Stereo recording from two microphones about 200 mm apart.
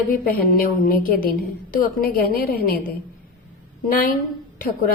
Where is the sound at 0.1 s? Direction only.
45° left (ahead or behind).